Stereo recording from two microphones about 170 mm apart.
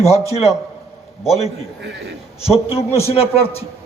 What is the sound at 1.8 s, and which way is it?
Speech, 90° right.